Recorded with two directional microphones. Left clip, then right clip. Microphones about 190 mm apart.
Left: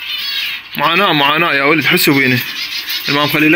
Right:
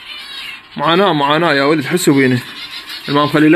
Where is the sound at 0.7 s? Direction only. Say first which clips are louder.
Even; 10° right (ahead or behind).